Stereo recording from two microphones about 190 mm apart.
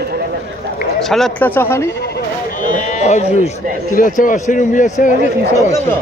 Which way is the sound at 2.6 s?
40° left (ahead or behind).